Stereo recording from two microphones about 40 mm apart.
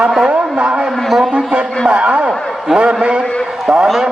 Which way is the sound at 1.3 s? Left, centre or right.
Right.